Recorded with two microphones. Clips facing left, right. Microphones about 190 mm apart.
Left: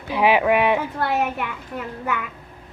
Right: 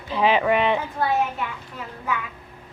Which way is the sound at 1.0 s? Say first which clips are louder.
Even; 70° left (ahead or behind).